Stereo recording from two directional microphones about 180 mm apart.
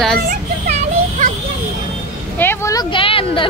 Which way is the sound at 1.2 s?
45° right (ahead or behind).